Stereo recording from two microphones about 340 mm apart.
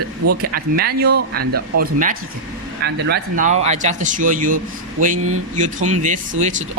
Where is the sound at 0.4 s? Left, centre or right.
Right.